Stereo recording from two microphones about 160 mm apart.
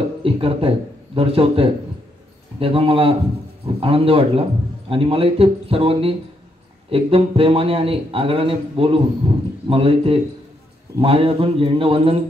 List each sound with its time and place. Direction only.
0.2 s a man's voice: 35° right (ahead or behind)